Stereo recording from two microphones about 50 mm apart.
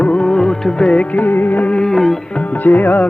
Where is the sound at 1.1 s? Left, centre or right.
Left.